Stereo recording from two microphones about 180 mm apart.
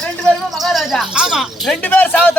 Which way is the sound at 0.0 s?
5° left (ahead or behind).